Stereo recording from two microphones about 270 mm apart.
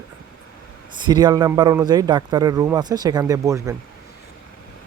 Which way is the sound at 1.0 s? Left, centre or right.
Centre.